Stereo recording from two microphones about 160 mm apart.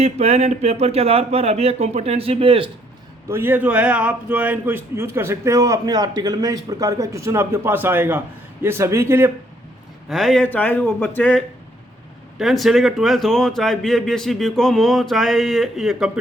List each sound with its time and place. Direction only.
0.0 s speech: 40° right (ahead or behind)
3.2 s a man's voice: 15° right (ahead or behind)
10.1 s a man's voice: centre (ahead or behind)